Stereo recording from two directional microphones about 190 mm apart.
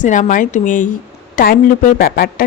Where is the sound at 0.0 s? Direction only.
40° left (ahead or behind).